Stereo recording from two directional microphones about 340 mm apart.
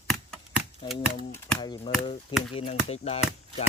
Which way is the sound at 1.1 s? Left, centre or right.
Centre.